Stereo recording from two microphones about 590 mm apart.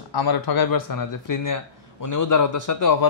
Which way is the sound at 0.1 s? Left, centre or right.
Left.